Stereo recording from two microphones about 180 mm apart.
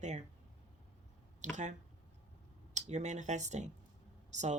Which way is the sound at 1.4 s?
45° right (ahead or behind).